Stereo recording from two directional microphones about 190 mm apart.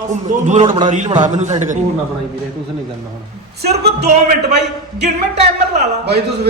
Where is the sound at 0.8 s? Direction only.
40° right (ahead or behind).